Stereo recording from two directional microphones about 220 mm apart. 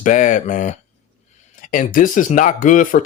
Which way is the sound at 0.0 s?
35° left (ahead or behind).